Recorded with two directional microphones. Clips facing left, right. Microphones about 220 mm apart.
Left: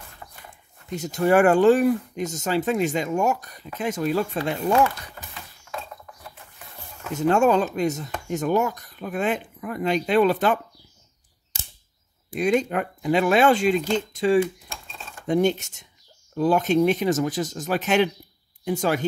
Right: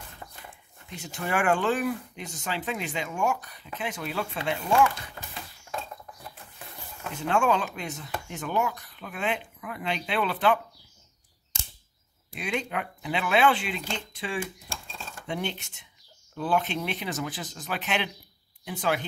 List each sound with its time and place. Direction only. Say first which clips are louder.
0.8 s speech: left 12 dB; 40° left (ahead or behind)
7.2 s speech: left 7 dB; 40° left (ahead or behind)
12.3 s speech: left 10 dB; 45° left (ahead or behind)